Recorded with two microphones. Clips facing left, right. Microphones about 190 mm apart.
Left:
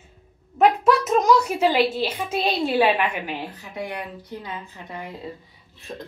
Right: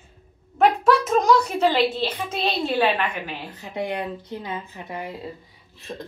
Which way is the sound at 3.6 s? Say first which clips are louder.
Right 4 dB; 20° right (ahead or behind).